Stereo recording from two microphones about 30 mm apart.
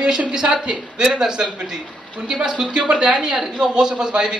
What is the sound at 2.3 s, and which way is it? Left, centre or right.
Speech, right.